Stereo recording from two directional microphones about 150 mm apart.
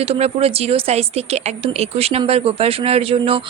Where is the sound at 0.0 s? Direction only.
40° right (ahead or behind).